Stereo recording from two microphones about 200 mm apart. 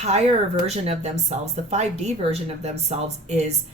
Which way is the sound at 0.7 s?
35° right (ahead or behind).